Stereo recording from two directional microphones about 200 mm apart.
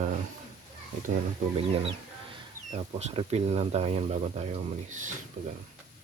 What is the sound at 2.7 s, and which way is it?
Speech, 30° right (ahead or behind).